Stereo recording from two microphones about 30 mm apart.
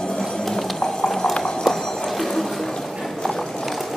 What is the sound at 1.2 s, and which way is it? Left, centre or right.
Clip-clop, left.